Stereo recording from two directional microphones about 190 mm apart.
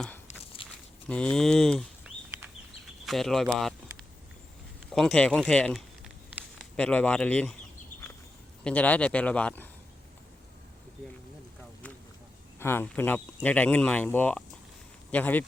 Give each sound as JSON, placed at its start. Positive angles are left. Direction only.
{"t": 0.3, "sound": "a sound", "side_deg": 30}
{"t": 1.0, "sound": "speech", "side_deg": 5}
{"t": 4.9, "sound": "speech", "side_deg": 0}
{"t": 8.6, "sound": "speech", "side_deg": 10}
{"t": 12.5, "sound": "speech", "side_deg": 10}